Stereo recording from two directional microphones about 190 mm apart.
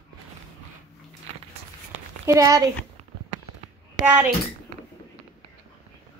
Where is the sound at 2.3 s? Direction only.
20° right (ahead or behind).